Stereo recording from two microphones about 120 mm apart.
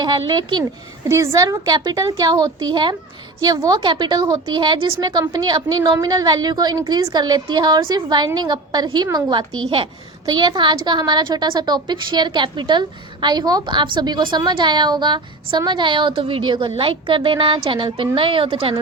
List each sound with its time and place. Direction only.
0.0 s speech: 35° right (ahead or behind)
0.6 s a child's voice: 25° right (ahead or behind)